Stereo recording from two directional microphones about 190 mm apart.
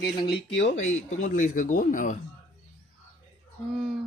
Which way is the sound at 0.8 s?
40° left (ahead or behind).